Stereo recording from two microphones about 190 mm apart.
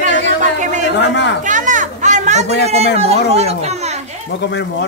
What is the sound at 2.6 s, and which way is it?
Speech, 35° right (ahead or behind).